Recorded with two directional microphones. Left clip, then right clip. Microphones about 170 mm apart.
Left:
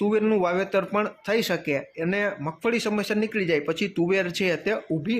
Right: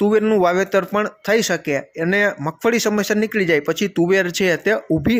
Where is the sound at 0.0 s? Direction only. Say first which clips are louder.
Right 7 dB; 25° right (ahead or behind).